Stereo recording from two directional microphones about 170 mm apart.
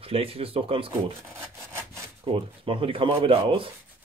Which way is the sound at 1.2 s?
15° right (ahead or behind).